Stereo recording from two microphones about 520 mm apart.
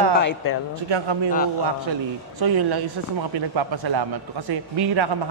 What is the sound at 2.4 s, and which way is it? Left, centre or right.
A man's voice, right.